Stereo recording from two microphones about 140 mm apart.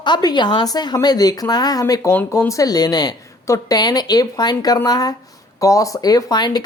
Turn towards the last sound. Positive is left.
turn(degrees=30)  # may be behind; listen again after turning